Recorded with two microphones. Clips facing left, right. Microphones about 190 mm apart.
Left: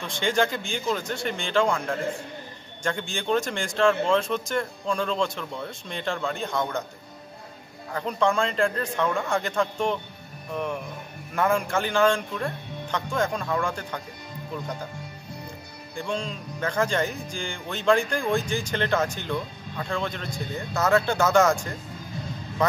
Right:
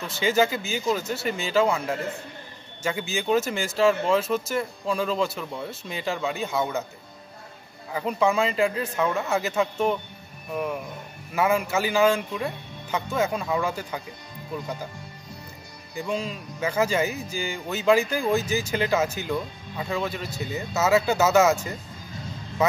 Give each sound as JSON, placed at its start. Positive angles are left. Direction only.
{"t": 0.0, "sound": "speech", "side_deg": -5}
{"t": 7.9, "sound": "speech", "side_deg": -5}
{"t": 15.9, "sound": "speech", "side_deg": -5}